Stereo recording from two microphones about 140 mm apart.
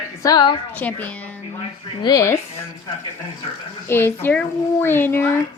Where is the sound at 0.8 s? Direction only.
10° left (ahead or behind).